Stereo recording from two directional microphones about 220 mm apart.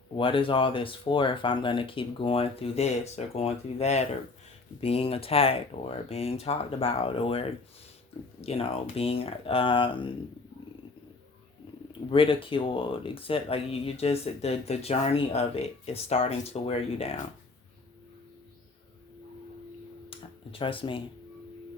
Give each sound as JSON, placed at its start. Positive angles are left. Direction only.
{"t": 0.2, "sound": "speech", "side_deg": 25}
{"t": 11.9, "sound": "speech", "side_deg": 25}
{"t": 20.1, "sound": "a sound", "side_deg": 25}